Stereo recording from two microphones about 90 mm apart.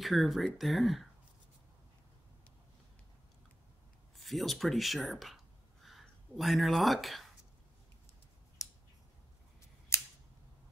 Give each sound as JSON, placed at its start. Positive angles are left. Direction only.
{"t": 0.0, "sound": "speech", "side_deg": 0}
{"t": 4.2, "sound": "speech", "side_deg": 0}
{"t": 8.6, "sound": "finger snapping", "side_deg": 35}